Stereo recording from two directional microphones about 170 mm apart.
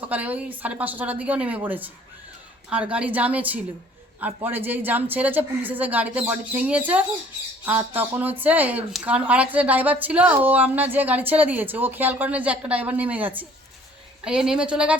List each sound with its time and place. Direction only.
0.1 s a woman's voice: 10° right (ahead or behind)